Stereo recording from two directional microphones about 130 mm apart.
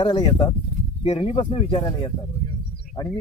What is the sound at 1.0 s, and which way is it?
Speech, 45° left (ahead or behind).